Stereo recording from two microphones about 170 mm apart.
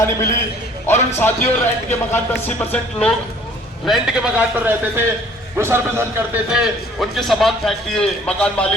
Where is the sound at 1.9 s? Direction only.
10° left (ahead or behind).